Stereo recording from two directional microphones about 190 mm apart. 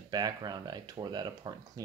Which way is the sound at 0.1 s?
20° right (ahead or behind).